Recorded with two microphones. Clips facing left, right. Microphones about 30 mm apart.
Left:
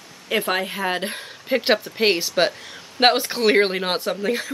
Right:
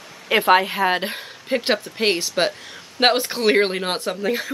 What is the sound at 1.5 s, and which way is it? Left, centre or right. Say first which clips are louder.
Speech: left 1 dB; centre.